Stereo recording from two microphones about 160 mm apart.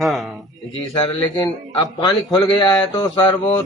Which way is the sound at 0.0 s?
Centre (ahead or behind).